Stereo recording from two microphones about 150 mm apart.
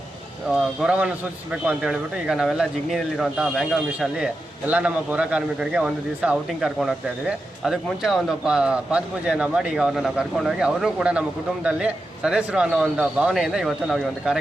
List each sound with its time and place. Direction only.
0.5 s a man's voice: 5° right (ahead or behind)